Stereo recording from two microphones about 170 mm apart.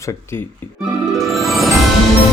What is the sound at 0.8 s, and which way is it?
Music, centre (ahead or behind).